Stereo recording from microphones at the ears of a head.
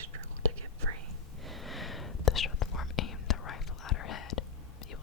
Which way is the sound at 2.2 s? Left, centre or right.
Left.